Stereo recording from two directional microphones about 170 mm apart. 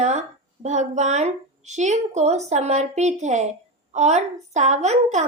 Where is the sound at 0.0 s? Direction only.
40° right (ahead or behind).